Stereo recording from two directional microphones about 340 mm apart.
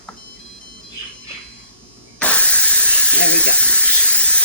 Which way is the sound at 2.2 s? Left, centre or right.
Centre.